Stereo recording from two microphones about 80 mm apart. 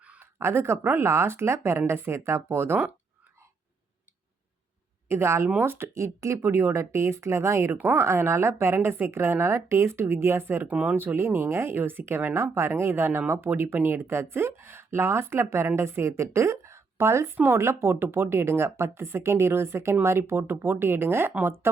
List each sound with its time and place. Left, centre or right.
0.0 s a sound: centre
0.3 s a woman's voice: right
5.0 s a woman's voice: right